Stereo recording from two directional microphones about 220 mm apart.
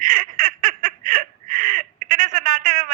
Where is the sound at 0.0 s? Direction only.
40° right (ahead or behind).